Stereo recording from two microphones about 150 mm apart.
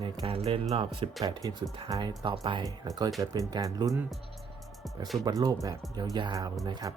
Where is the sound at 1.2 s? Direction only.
25° right (ahead or behind).